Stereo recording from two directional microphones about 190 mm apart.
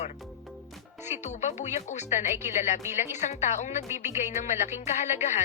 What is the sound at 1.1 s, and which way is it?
Speech, 35° left (ahead or behind).